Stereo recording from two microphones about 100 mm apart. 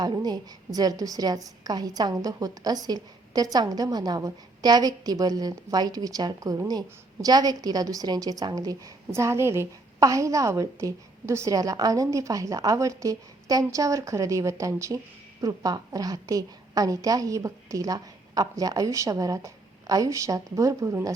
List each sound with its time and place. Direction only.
0.0 s a woman's voice: 40° right (ahead or behind)